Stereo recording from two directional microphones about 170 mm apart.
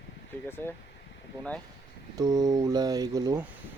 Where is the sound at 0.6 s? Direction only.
15° left (ahead or behind).